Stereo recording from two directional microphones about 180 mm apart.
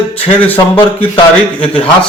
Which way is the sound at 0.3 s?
10° left (ahead or behind).